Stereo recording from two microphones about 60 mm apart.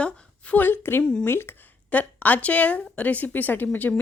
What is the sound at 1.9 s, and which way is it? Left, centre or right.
A woman's voice, left.